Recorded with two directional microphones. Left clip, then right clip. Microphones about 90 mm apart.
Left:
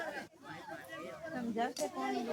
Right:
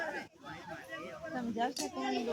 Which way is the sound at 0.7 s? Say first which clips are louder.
Right 1 dB; centre (ahead or behind).